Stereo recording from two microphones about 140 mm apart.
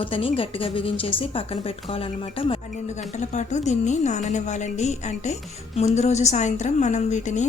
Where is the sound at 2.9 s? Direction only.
60° left (ahead or behind).